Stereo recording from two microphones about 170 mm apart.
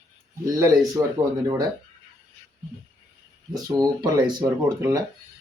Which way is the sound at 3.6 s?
20° right (ahead or behind).